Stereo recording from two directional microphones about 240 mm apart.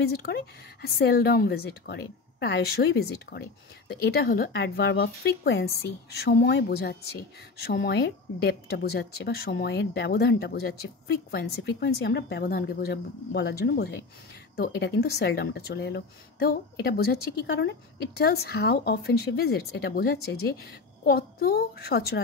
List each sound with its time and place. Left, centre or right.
0.1 s speech: left